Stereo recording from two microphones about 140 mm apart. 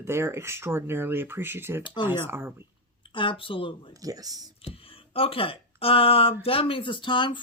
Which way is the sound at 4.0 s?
25° right (ahead or behind).